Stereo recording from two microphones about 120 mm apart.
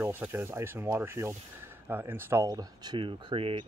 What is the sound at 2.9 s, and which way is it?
Speech, 50° right (ahead or behind).